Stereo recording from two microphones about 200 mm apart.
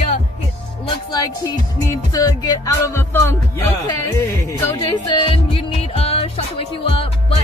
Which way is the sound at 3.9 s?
15° left (ahead or behind).